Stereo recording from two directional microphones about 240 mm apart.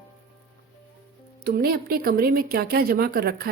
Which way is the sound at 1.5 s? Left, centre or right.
Right.